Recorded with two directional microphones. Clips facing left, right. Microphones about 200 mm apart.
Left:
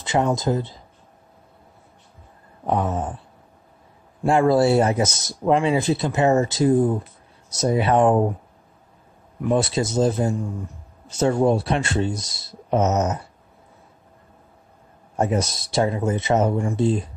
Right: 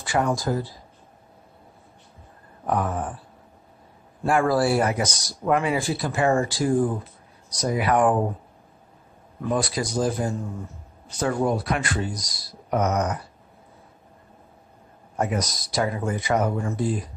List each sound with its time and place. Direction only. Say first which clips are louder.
0.0 s speech: left 3 dB; 20° left (ahead or behind)
2.6 s speech: left 2 dB; 25° left (ahead or behind)
4.2 s speech: left 4 dB; 25° left (ahead or behind)
9.5 s speech: left 4 dB; 25° left (ahead or behind)
15.1 s speech: left 4 dB; 25° left (ahead or behind)